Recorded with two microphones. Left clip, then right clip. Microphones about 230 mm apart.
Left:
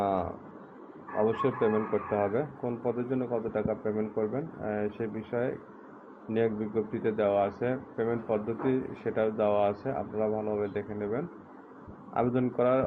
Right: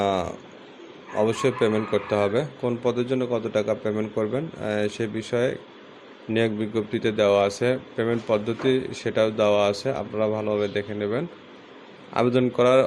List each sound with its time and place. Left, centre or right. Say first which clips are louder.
0.0 s speech: right 5 dB; right